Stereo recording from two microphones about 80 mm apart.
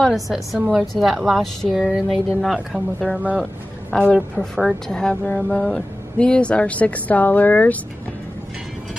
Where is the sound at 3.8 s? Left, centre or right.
Left.